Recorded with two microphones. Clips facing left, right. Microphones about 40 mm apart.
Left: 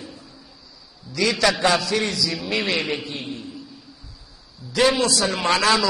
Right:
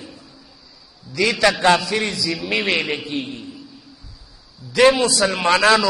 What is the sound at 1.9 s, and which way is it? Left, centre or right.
Speech, right.